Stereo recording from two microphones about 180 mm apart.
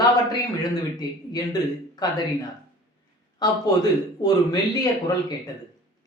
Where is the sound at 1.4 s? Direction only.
20° left (ahead or behind).